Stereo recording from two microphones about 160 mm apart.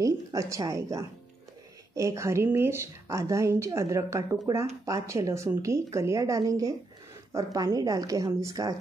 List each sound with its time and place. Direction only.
0.0 s a woman's voice: 20° right (ahead or behind)